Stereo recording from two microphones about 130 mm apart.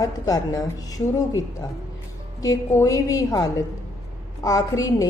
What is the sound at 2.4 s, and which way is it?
Speech, 25° left (ahead or behind).